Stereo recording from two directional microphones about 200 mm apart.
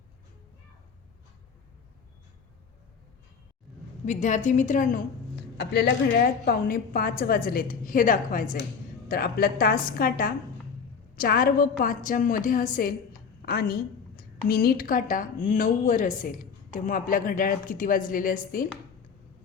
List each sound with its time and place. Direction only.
4.0 s a woman's voice: 35° left (ahead or behind)